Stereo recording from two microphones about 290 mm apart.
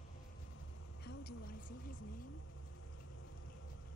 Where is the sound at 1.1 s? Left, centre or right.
Left.